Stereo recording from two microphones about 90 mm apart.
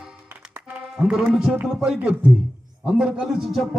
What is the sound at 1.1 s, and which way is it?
Speech, 5° right (ahead or behind).